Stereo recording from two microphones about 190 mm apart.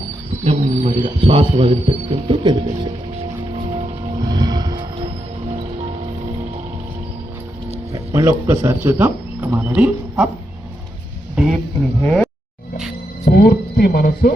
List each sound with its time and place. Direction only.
0.4 s speech: 30° right (ahead or behind)
4.2 s vehicle: 20° right (ahead or behind)
7.9 s speech: 15° right (ahead or behind)
12.0 s speech: 5° left (ahead or behind)
13.2 s speech: 60° left (ahead or behind)